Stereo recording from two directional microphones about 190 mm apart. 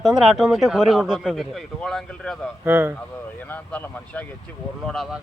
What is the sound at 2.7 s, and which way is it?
Speech, 10° right (ahead or behind).